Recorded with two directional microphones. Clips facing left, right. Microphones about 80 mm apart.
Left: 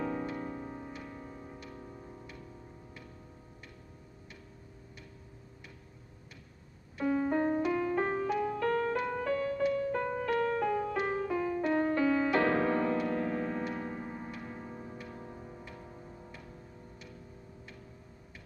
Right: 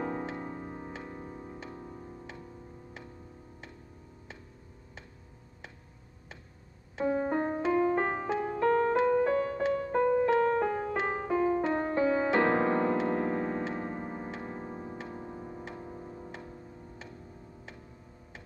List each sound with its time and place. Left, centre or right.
0.0 s music: right
7.0 s piano: right
15.7 s music: right